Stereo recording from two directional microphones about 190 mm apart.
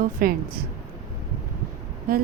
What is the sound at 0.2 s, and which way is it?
Speech, 45° right (ahead or behind).